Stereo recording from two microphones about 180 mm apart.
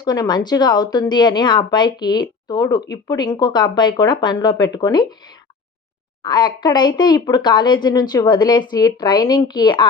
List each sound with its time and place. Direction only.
0.0 s a woman's voice: 20° left (ahead or behind)